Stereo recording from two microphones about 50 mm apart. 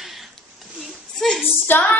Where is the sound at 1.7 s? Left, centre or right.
Left.